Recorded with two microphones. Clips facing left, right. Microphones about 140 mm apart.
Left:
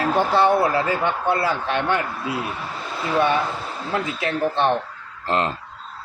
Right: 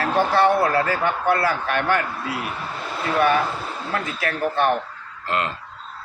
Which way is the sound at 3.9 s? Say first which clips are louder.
Left 3 dB; 25° left (ahead or behind).